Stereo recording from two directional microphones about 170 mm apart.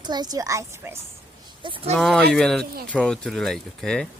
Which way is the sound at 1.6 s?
30° right (ahead or behind).